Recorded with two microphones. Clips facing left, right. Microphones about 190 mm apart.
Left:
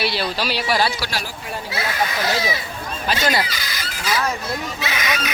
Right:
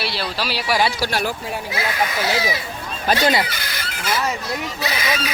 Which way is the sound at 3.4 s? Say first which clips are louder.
Right 1 dB; 60° right (ahead or behind).